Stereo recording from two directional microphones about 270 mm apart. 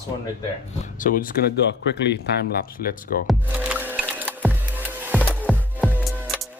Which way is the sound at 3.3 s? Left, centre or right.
Centre.